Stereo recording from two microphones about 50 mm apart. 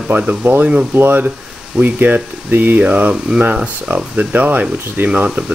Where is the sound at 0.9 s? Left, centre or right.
Right.